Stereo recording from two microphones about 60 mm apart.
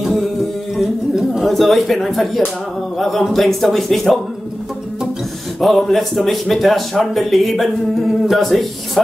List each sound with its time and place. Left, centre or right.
0.0 s music: centre
0.7 s speech: centre
5.6 s speech: centre